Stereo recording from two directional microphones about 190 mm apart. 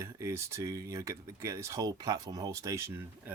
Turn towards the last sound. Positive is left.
turn(degrees=-15)  # may be behind; listen again after turning